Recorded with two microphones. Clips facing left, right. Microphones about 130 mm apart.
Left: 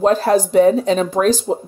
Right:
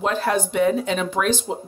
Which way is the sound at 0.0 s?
35° left (ahead or behind).